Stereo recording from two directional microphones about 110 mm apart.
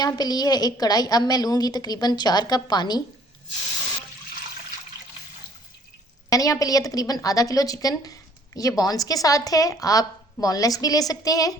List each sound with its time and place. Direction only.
0.0 s a woman's voice: 35° left (ahead or behind)
6.3 s a woman's voice: 30° left (ahead or behind)